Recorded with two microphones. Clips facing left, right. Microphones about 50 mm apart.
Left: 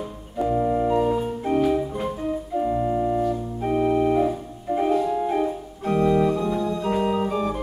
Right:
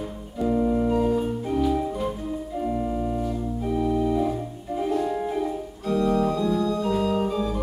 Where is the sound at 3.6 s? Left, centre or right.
Left.